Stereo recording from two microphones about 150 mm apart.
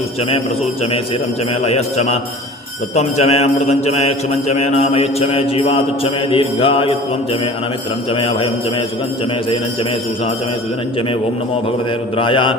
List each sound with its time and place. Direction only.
0.2 s a man's voice: 40° left (ahead or behind)
8.1 s a man's voice: 40° left (ahead or behind)
12.1 s a man's voice: 35° left (ahead or behind)